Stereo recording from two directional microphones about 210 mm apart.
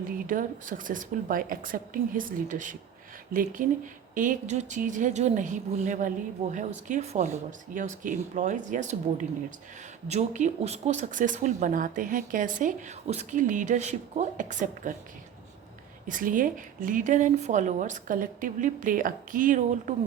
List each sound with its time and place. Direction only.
0.3 s speech: 40° right (ahead or behind)
16.0 s speech: 40° right (ahead or behind)